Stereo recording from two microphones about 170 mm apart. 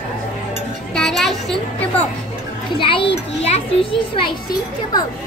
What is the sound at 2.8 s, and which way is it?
A child's voice, 30° left (ahead or behind).